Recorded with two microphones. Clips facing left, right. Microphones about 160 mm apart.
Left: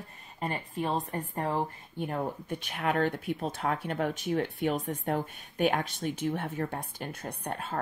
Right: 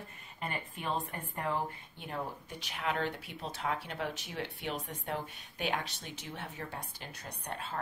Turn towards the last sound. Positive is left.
turn(degrees=50)  # may be behind; listen again after turning